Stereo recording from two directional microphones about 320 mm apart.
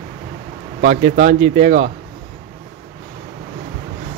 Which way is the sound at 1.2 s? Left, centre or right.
Right.